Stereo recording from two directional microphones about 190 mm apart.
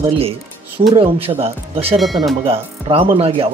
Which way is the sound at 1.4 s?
30° right (ahead or behind).